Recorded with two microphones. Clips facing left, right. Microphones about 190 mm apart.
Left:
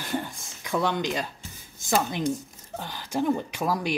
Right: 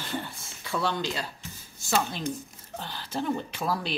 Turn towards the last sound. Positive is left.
turn(degrees=15)  # may be behind; listen again after turning